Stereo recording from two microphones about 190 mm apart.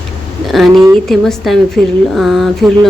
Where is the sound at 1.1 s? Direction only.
Centre (ahead or behind).